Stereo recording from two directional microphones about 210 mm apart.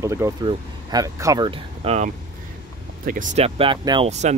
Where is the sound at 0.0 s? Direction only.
15° right (ahead or behind).